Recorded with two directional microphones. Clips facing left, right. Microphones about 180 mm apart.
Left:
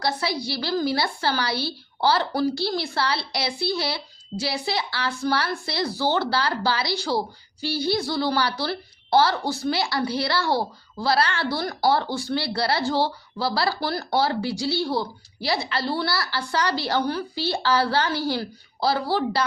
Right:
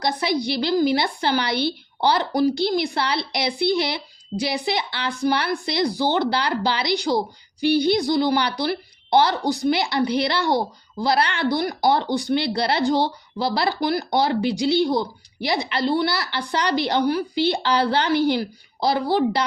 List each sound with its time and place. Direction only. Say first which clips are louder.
0.0 s a woman's voice: right 4 dB; 20° right (ahead or behind)